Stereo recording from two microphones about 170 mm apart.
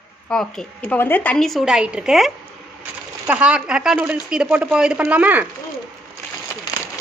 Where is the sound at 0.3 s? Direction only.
5° left (ahead or behind).